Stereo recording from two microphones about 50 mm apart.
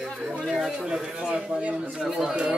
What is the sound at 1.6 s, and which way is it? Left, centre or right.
Speech, right.